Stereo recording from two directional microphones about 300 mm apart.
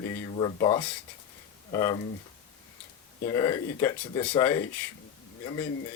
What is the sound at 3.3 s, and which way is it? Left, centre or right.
A man's voice, centre.